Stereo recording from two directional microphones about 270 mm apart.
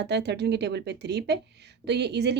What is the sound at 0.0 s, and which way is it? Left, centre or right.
A woman's voice, right.